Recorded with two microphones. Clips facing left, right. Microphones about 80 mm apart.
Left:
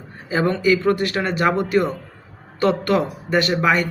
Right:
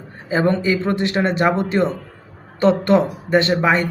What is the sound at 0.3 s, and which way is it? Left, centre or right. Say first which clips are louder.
Speech: even; right.